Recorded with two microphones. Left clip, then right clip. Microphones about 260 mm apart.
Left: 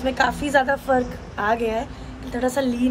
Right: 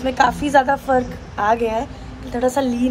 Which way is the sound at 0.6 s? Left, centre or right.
Centre.